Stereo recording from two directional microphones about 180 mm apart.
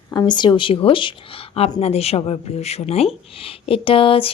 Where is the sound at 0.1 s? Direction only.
25° left (ahead or behind).